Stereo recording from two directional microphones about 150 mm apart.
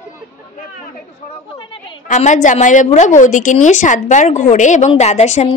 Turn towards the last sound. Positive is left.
turn(degrees=50)  # may be behind; listen again after turning